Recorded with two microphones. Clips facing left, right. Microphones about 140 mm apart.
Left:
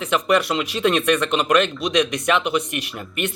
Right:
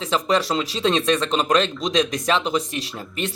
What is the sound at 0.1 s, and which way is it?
Speech, 30° right (ahead or behind).